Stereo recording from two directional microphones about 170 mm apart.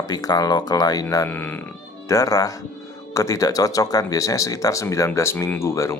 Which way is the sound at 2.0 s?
20° left (ahead or behind).